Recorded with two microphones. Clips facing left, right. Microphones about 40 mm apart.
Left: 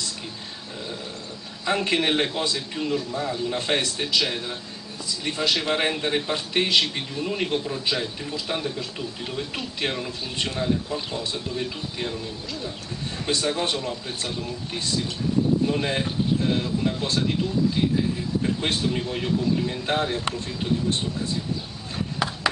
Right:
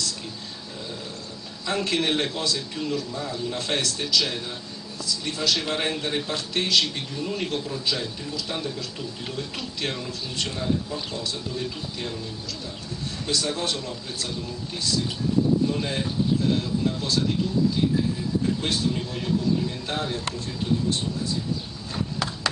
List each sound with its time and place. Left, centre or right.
1.7 s a man's voice: centre
13.3 s a man's voice: left
18.6 s a man's voice: left
22.2 s a sound: centre